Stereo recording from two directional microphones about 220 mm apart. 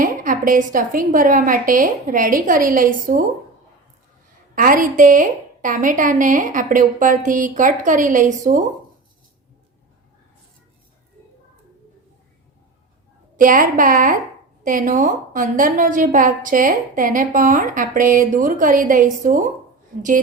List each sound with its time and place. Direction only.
0.0 s a woman's voice: 40° right (ahead or behind)
4.5 s a woman's voice: 40° right (ahead or behind)
13.3 s a woman's voice: 40° right (ahead or behind)